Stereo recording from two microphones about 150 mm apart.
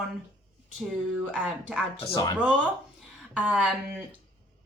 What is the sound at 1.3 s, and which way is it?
Speech, 5° right (ahead or behind).